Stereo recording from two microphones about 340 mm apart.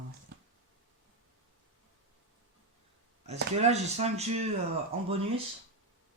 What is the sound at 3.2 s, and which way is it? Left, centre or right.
Speech, centre.